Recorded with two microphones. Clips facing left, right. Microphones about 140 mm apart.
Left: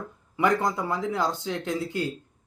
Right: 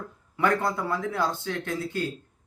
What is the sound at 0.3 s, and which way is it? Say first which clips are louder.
Speech: left 1 dB; 15° left (ahead or behind).